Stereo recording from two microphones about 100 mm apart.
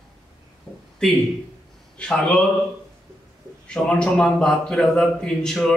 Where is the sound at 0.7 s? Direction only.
15° left (ahead or behind).